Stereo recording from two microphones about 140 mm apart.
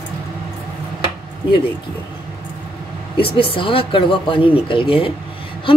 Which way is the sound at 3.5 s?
40° left (ahead or behind).